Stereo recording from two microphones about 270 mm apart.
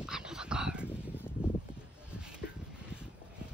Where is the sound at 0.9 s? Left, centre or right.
Centre.